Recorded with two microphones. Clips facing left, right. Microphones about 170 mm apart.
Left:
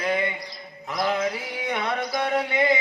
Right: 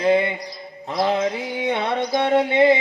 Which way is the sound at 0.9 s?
30° right (ahead or behind).